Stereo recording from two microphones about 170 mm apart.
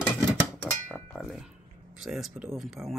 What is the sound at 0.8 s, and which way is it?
Chink, 5° left (ahead or behind).